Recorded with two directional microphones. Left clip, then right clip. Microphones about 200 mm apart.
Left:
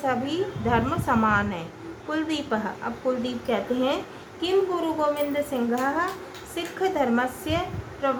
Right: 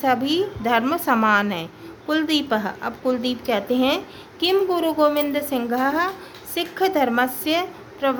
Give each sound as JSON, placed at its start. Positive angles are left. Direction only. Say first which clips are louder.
{"t": 0.6, "sound": "a woman's voice", "louder": "right 2 dB", "side_deg": -55}